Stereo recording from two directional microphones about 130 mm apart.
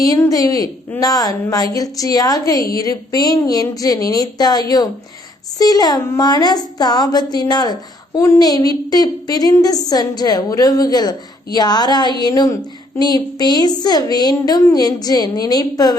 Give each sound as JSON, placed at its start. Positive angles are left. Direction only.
{"t": 0.0, "sound": "a woman's voice", "side_deg": 25}